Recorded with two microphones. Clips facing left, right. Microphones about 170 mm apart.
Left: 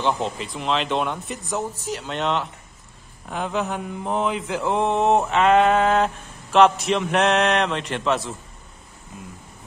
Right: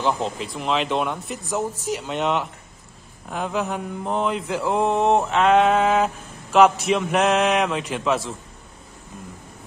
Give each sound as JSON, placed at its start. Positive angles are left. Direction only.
{"t": 0.0, "sound": "mantra", "side_deg": 0}
{"t": 1.9, "sound": "speech", "side_deg": -5}
{"t": 3.3, "sound": "mantra", "side_deg": 0}